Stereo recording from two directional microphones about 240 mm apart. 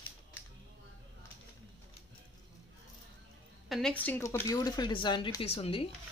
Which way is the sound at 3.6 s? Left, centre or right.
Centre.